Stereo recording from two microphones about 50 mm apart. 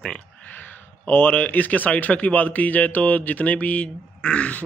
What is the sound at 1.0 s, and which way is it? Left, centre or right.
Speech, left.